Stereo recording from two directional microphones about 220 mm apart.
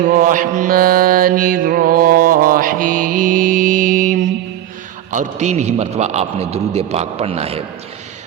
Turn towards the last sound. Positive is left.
turn(degrees=-25)  # may be behind; listen again after turning